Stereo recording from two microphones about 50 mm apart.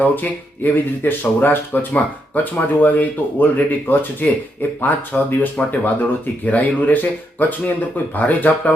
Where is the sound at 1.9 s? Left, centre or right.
Left.